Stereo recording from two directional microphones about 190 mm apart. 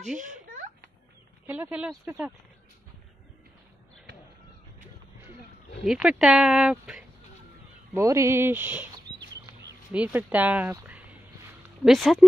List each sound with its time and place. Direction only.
0.2 s a sound: 45° right (ahead or behind)
1.5 s speech: 10° right (ahead or behind)
5.9 s speech: 5° right (ahead or behind)
7.9 s speech: 15° right (ahead or behind)
9.9 s speech: 10° right (ahead or behind)